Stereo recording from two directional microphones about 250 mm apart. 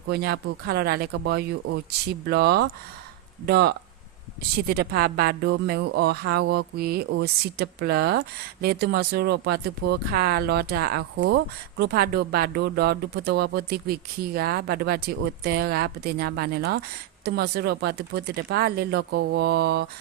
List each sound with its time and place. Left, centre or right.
0.1 s speech: right